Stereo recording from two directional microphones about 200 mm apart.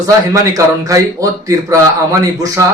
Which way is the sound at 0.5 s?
15° right (ahead or behind).